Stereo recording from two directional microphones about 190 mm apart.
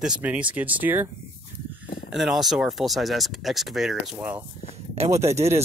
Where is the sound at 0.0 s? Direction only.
5° right (ahead or behind).